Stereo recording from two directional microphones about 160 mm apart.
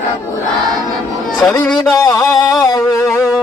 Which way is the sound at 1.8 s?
20° left (ahead or behind).